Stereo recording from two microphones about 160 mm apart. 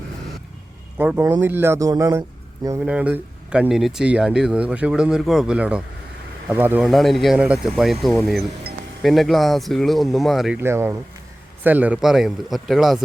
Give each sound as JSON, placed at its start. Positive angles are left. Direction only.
{"t": 0.9, "sound": "speech", "side_deg": -15}
{"t": 2.8, "sound": "speech", "side_deg": -10}
{"t": 6.8, "sound": "speech", "side_deg": 0}
{"t": 10.6, "sound": "speech", "side_deg": -15}